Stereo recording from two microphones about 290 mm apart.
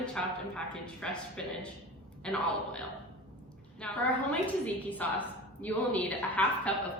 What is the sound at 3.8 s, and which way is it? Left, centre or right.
A woman's voice, centre.